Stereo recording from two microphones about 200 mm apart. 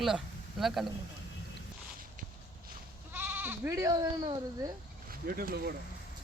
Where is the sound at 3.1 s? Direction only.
10° right (ahead or behind).